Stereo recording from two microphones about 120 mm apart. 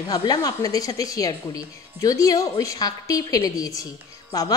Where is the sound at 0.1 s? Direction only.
35° left (ahead or behind).